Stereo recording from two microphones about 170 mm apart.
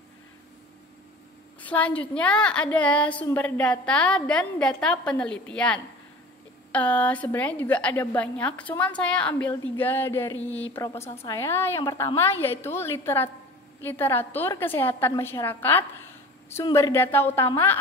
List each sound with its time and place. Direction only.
1.6 s a woman's voice: 10° left (ahead or behind)